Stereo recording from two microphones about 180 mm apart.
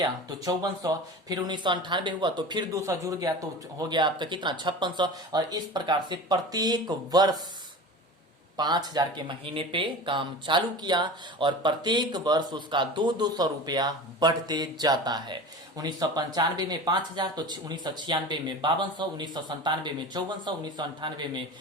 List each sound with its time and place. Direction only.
0.0 s speech: 20° right (ahead or behind)
8.5 s speech: 25° right (ahead or behind)